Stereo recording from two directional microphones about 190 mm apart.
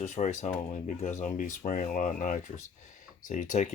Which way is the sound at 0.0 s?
35° left (ahead or behind).